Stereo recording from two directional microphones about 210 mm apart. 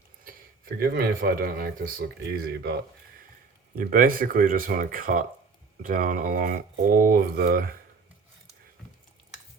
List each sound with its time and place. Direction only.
0.8 s speech: 45° right (ahead or behind)
3.8 s speech: 45° right (ahead or behind)